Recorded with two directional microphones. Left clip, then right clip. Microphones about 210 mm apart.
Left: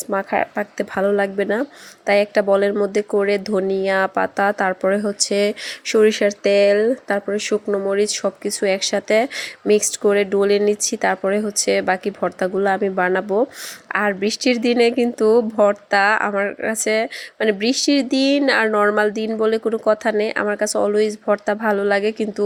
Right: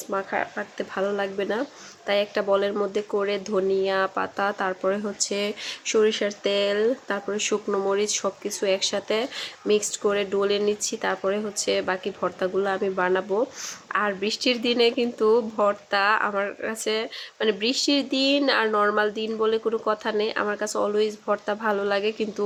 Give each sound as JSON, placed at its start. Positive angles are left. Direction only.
{"t": 0.1, "sound": "speech", "side_deg": 35}